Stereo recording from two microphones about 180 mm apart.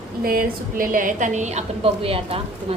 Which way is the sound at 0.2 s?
55° right (ahead or behind).